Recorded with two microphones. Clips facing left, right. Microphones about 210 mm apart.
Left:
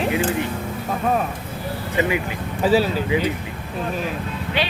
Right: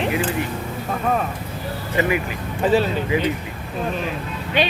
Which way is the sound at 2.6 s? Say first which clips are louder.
Even; 5° left (ahead or behind).